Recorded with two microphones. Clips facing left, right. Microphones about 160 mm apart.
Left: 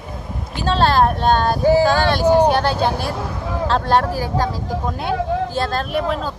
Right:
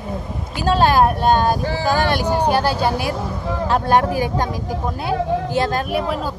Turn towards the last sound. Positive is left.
turn(degrees=-5)  # may be behind; listen again after turning